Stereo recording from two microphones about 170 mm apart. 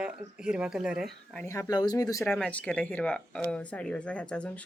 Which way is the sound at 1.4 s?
20° left (ahead or behind).